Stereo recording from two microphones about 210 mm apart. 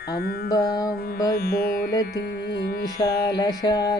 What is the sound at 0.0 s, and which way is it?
Music, 50° left (ahead or behind).